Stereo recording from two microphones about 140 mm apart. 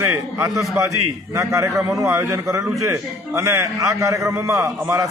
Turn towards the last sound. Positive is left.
turn(degrees=-20)  # may be behind; listen again after turning